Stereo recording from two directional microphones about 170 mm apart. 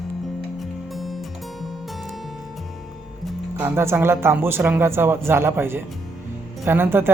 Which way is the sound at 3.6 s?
15° right (ahead or behind).